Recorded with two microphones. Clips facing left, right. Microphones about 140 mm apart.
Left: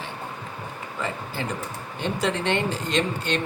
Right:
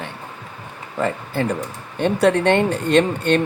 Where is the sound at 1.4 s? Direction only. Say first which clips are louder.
Right 10 dB; 55° right (ahead or behind).